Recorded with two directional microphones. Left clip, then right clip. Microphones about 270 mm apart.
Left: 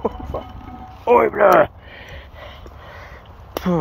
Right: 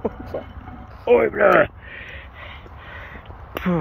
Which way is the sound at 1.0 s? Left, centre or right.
Centre.